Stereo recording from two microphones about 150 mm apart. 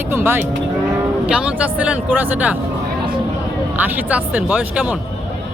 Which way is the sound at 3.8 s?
10° right (ahead or behind).